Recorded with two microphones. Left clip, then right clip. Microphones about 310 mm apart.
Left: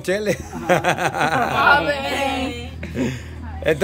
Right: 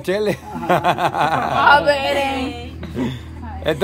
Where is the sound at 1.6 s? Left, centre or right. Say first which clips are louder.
Right 5 dB; right.